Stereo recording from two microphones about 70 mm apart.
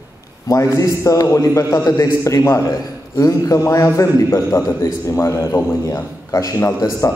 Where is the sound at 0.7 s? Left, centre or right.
Left.